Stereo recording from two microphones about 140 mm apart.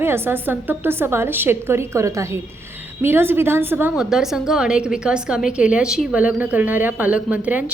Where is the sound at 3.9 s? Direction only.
5° right (ahead or behind).